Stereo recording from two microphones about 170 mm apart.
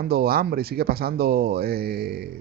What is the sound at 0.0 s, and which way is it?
A man's voice, 65° right (ahead or behind).